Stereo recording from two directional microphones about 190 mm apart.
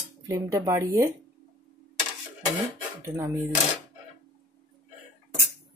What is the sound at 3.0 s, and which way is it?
Speech, 15° right (ahead or behind).